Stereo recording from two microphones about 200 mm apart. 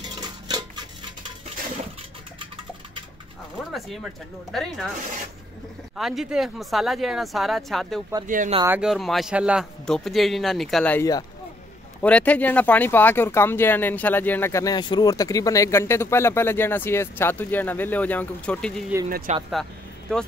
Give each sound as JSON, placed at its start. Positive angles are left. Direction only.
{"t": 0.0, "sound": "a sound", "side_deg": -20}
{"t": 3.7, "sound": "a man's voice", "side_deg": 0}
{"t": 5.9, "sound": "a man's voice", "side_deg": 0}
{"t": 8.3, "sound": "speech", "side_deg": -40}
{"t": 8.6, "sound": "a man's voice", "side_deg": -5}
{"t": 19.0, "sound": "speech", "side_deg": -45}
{"t": 20.1, "sound": "a man's voice", "side_deg": 5}